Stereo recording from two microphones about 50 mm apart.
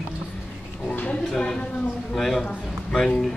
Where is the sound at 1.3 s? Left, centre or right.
Centre.